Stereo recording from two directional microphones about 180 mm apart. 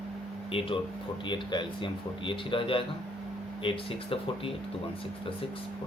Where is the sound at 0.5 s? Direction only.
30° left (ahead or behind).